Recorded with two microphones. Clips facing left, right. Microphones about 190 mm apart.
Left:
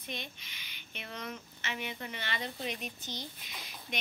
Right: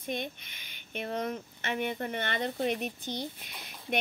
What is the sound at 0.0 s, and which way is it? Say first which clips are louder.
Speech: right 8 dB; 50° right (ahead or behind).